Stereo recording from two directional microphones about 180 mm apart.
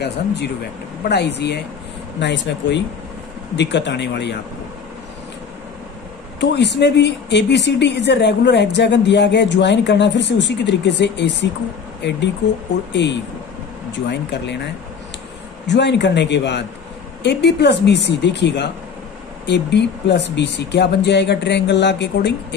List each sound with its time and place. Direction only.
1.0 s speech: 70° left (ahead or behind)
6.4 s speech: 70° left (ahead or behind)
13.9 s speech: 75° left (ahead or behind)
15.6 s speech: 75° left (ahead or behind)